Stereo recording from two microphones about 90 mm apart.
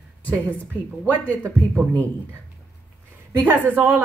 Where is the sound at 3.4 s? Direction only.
20° right (ahead or behind).